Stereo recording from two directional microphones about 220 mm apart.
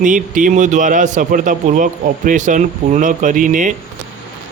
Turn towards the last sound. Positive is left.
turn(degrees=-35)  # may be behind; listen again after turning